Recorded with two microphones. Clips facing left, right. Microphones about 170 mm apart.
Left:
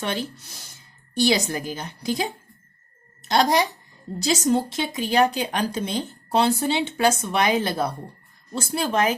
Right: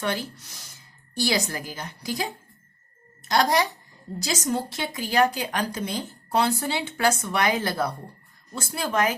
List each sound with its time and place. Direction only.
0.0 s a woman's voice: 25° left (ahead or behind)
3.2 s a woman's voice: 25° left (ahead or behind)